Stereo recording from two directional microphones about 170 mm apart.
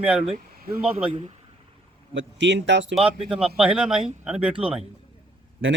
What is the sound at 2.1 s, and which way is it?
Speech, 90° right.